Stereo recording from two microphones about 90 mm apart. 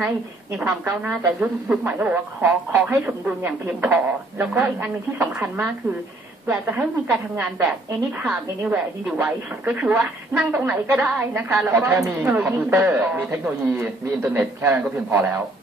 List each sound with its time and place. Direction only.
0.7 s speech: 25° right (ahead or behind)
1.1 s speech: 10° right (ahead or behind)